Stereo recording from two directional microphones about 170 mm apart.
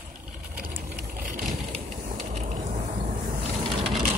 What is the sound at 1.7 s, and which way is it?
Mechanisms, 45° right (ahead or behind).